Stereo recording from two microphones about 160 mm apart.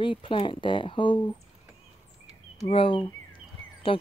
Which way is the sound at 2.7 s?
35° left (ahead or behind).